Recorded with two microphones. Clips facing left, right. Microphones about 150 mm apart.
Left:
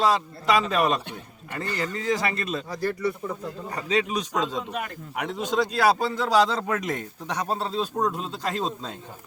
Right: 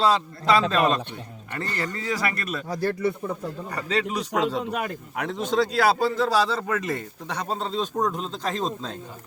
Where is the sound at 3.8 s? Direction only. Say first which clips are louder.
Left 1 dB; 15° left (ahead or behind).